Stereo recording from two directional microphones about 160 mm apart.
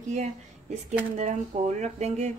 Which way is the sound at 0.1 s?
45° right (ahead or behind).